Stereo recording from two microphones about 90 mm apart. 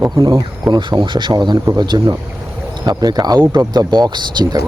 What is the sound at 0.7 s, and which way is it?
Speech, 60° right (ahead or behind).